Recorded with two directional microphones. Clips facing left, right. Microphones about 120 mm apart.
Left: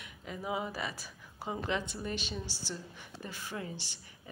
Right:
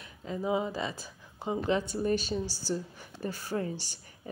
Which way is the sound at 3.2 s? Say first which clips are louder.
Right 8 dB; 40° right (ahead or behind).